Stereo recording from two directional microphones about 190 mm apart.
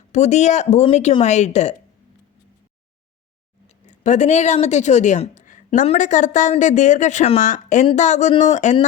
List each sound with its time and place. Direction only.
0.1 s speech: 40° left (ahead or behind)
3.7 s speech: 40° left (ahead or behind)